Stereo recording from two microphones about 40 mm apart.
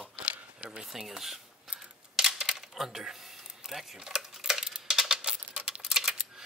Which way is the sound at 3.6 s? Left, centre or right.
Centre.